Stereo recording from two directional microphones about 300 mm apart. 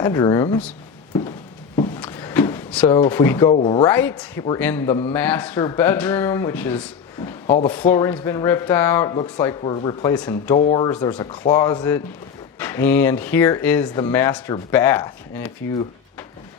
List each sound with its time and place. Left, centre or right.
0.0 s a man's voice: centre
2.0 s drawer open or close: centre
3.5 s a man's voice: centre
7.4 s a man's voice: centre
10.5 s a man's voice: centre